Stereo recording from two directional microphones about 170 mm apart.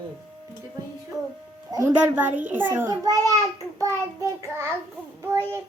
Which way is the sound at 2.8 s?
20° right (ahead or behind).